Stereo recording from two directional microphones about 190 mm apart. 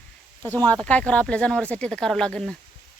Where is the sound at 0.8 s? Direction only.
5° left (ahead or behind).